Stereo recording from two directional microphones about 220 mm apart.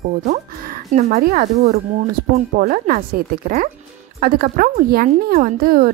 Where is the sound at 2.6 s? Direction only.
40° right (ahead or behind).